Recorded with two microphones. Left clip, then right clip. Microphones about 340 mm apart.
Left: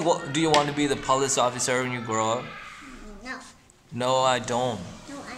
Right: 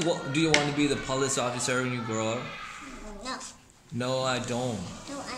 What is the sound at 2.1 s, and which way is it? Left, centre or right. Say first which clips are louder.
Speech: left 8 dB; left.